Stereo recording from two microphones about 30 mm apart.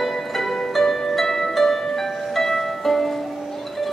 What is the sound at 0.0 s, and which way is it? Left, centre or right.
Music, centre.